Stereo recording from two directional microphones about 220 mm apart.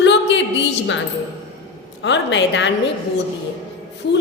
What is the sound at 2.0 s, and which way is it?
Speech, 55° left (ahead or behind).